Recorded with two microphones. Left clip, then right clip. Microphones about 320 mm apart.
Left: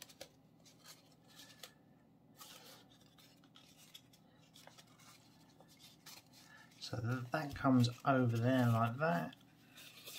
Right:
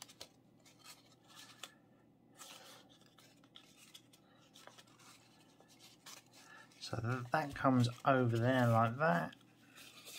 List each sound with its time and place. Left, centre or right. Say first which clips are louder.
6.5 s speech: right 2 dB; centre